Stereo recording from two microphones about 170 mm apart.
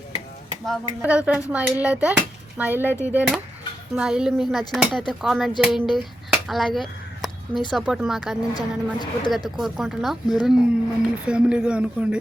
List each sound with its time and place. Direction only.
0.6 s speech: 5° right (ahead or behind)
8.5 s a woman's voice: 25° left (ahead or behind)
9.6 s speech: centre (ahead or behind)